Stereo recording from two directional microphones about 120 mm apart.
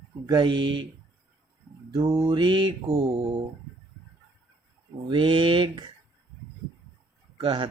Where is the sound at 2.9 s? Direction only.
55° right (ahead or behind).